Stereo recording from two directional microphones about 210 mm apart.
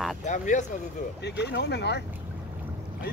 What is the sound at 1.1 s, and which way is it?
Speech, 55° left (ahead or behind).